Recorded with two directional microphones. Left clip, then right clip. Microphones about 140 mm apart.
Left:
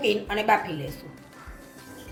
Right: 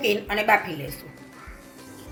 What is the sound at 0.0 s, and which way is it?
Speech, 25° right (ahead or behind).